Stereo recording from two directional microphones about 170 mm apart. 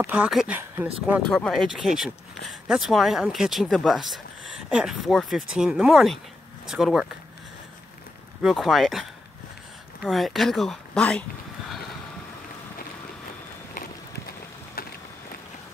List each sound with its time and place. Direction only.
0.0 s speech: 5° right (ahead or behind)
8.4 s speech: centre (ahead or behind)
10.0 s speech: centre (ahead or behind)
14.8 s vehicle: 60° left (ahead or behind)